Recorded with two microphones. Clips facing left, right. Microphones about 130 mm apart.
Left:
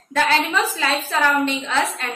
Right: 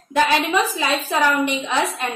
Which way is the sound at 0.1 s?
15° right (ahead or behind).